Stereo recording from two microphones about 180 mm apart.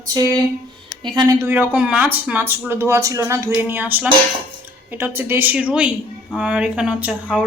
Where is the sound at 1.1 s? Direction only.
20° right (ahead or behind).